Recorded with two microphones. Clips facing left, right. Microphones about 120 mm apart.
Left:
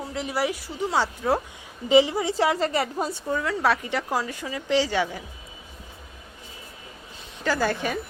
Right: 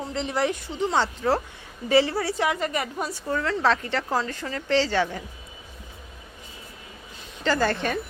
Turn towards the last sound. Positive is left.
turn(degrees=10)  # may be behind; listen again after turning